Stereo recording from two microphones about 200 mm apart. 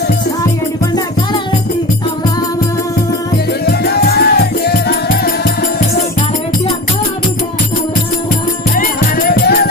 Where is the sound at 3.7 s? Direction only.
50° left (ahead or behind).